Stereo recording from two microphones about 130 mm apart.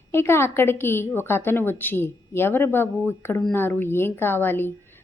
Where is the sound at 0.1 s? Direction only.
20° left (ahead or behind).